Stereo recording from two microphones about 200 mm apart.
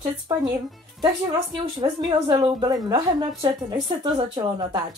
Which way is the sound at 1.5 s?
25° right (ahead or behind).